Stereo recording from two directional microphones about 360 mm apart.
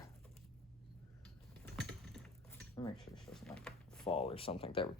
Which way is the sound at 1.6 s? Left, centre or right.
Centre.